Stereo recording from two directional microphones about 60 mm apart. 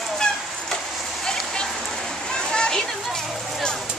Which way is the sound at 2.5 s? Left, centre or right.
Centre.